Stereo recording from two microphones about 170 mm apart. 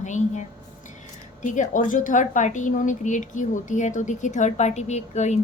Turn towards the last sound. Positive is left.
turn(degrees=40)  # may be behind; listen again after turning